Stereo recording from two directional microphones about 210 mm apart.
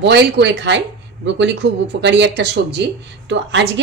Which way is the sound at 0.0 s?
55° right (ahead or behind).